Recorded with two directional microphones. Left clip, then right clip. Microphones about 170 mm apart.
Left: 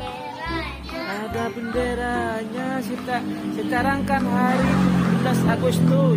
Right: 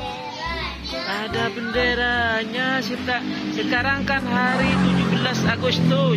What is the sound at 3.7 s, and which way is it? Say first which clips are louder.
Speech: even; 5° left (ahead or behind).